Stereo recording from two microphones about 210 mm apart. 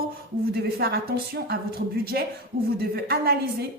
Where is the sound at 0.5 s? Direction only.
50° right (ahead or behind).